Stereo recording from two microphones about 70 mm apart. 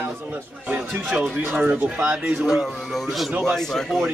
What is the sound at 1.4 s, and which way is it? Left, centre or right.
Speech, right.